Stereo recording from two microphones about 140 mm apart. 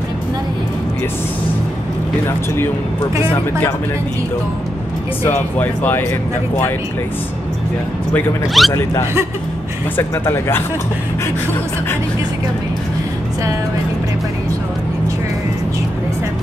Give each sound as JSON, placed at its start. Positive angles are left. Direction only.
{"t": 2.2, "sound": "speech", "side_deg": 20}
{"t": 5.2, "sound": "speech", "side_deg": 15}
{"t": 8.6, "sound": "speech", "side_deg": 0}
{"t": 9.9, "sound": "speech", "side_deg": 15}